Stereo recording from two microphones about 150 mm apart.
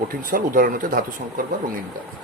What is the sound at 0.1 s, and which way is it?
Speech, 70° right (ahead or behind).